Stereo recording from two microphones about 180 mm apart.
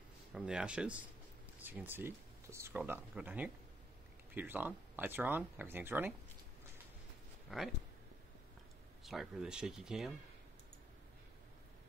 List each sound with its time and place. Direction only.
0.3 s speech: 5° right (ahead or behind)
7.5 s speech: centre (ahead or behind)
9.0 s speech: centre (ahead or behind)